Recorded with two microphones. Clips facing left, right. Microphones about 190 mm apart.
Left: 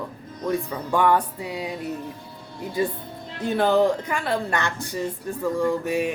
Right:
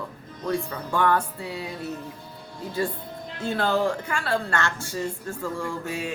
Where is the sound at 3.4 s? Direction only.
15° left (ahead or behind).